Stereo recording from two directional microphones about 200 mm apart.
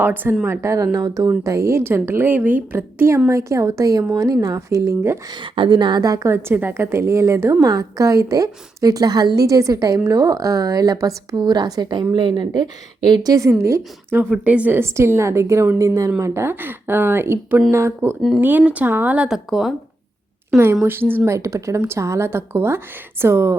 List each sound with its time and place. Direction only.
0.0 s a woman's voice: 10° right (ahead or behind)
20.7 s a woman's voice: 10° right (ahead or behind)